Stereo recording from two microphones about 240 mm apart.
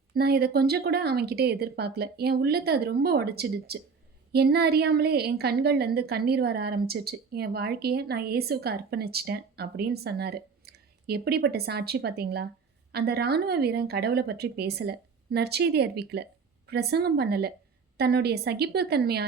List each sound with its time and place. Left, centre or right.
0.1 s a woman's voice: right